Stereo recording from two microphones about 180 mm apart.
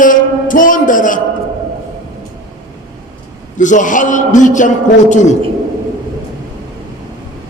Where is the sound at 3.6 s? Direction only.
45° left (ahead or behind).